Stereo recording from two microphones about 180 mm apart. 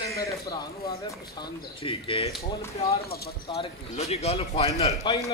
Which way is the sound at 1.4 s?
30° left (ahead or behind).